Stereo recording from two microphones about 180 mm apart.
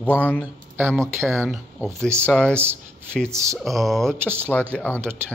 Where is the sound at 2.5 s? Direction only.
10° right (ahead or behind).